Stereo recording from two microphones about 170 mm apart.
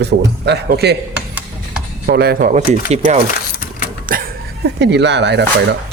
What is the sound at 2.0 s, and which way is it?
Speech, 65° right (ahead or behind).